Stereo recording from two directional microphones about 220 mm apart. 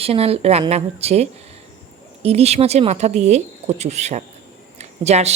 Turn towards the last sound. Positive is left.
turn(degrees=-30)  # may be behind; listen again after turning